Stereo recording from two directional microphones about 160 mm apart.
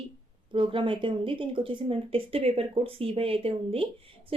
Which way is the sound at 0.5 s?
30° right (ahead or behind).